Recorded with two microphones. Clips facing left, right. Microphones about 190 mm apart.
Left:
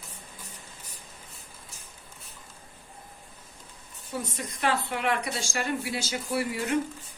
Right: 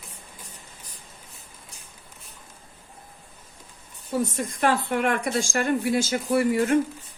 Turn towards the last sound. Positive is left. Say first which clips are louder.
# right 7 dB
turn(degrees=-50)  # may be behind; listen again after turning